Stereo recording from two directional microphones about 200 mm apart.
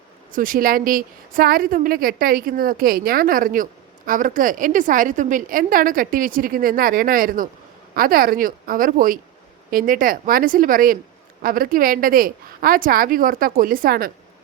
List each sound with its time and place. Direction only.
0.3 s a woman's voice: 45° right (ahead or behind)